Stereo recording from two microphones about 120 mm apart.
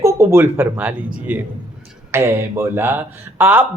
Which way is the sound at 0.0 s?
25° right (ahead or behind).